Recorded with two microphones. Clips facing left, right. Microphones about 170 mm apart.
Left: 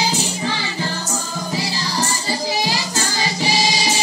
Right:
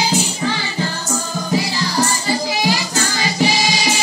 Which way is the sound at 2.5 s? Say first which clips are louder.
Right 3 dB; 30° left (ahead or behind).